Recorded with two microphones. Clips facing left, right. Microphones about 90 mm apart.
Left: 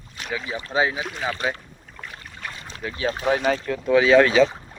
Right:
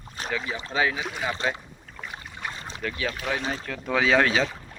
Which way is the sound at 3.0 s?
30° left (ahead or behind).